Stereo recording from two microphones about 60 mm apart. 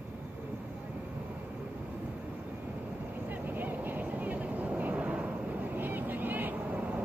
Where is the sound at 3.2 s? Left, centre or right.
Right.